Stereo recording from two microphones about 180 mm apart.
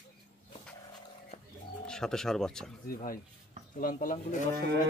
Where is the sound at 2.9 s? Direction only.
50° left (ahead or behind).